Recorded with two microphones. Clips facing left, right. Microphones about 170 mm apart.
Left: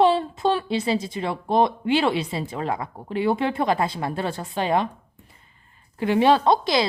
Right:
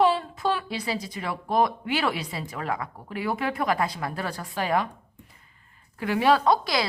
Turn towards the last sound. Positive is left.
turn(degrees=25)  # may be behind; listen again after turning